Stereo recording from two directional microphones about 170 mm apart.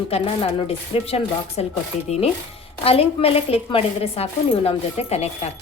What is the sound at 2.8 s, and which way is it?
A woman's voice, 35° left (ahead or behind).